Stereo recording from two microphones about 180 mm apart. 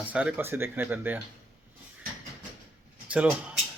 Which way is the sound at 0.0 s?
5° right (ahead or behind).